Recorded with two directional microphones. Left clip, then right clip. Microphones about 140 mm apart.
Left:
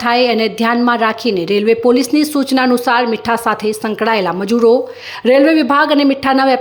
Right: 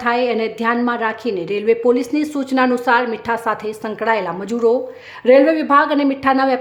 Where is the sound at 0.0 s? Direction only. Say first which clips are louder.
Left 5 dB; 25° left (ahead or behind).